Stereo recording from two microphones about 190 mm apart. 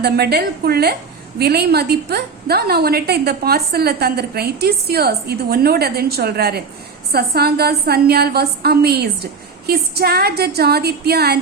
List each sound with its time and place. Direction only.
0.0 s a woman's voice: 55° right (ahead or behind)